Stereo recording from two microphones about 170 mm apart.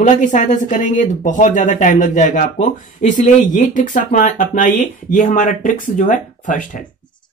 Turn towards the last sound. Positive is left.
turn(degrees=50)  # may be behind; listen again after turning